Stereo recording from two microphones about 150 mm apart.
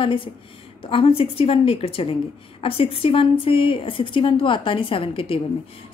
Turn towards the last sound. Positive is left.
turn(degrees=35)  # may be behind; listen again after turning